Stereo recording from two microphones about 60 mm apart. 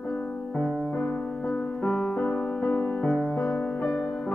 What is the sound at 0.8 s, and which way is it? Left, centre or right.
Music, left.